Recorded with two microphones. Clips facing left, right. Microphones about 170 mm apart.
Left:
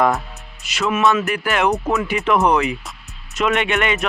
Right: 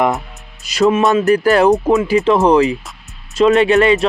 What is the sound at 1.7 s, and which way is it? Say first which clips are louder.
Speech: right 8 dB; 20° right (ahead or behind).